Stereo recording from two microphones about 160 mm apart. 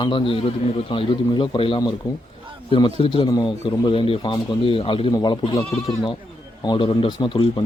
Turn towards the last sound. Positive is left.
turn(degrees=30)  # may be behind; listen again after turning